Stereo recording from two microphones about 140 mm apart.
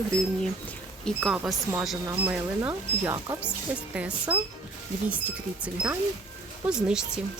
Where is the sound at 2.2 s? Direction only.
15° right (ahead or behind).